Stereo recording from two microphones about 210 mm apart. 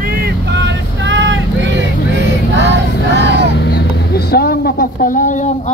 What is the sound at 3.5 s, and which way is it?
Vehicle, 55° left (ahead or behind).